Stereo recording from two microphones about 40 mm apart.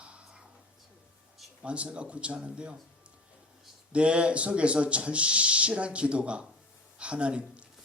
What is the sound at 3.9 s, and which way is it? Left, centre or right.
A man's voice, right.